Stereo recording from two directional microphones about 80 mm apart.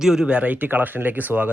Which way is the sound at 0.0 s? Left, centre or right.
Centre.